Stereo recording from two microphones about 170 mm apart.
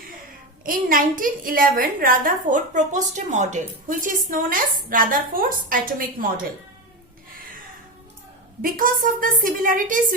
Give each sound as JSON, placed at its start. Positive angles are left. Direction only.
{"t": 0.6, "sound": "a child's voice", "side_deg": -55}
{"t": 8.6, "sound": "a woman's voice", "side_deg": -55}